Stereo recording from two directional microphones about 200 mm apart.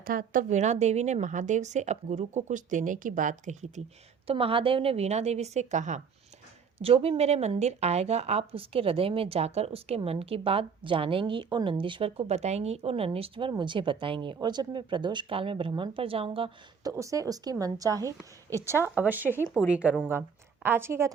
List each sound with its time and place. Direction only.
0.0 s speech: 45° right (ahead or behind); by 16.9 s 25° right (ahead or behind)
16.9 s a woman's voice: 15° right (ahead or behind)